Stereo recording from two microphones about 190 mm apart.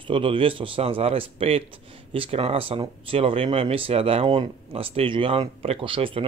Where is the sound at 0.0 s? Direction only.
25° right (ahead or behind).